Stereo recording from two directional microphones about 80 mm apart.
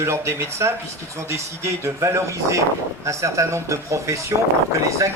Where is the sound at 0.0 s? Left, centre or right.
Right.